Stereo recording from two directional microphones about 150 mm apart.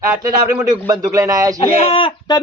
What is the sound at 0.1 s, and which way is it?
Speech, 25° right (ahead or behind).